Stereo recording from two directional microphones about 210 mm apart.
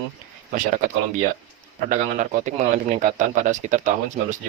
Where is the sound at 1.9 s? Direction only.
35° right (ahead or behind).